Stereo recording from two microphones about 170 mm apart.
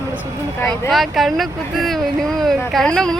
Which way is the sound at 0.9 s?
Centre (ahead or behind).